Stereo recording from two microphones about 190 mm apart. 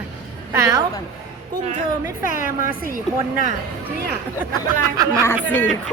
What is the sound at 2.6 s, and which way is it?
Speech, 50° right (ahead or behind).